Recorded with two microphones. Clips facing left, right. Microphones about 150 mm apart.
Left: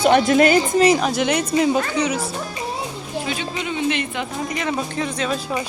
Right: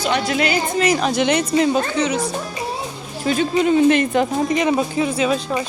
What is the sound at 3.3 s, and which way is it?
Speech, 40° right (ahead or behind).